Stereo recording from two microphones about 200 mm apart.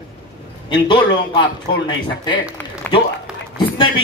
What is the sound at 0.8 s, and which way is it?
Speech, 25° left (ahead or behind).